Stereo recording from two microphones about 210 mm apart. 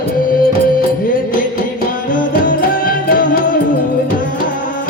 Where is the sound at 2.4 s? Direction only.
40° left (ahead or behind).